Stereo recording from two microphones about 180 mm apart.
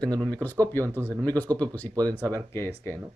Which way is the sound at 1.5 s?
20° right (ahead or behind).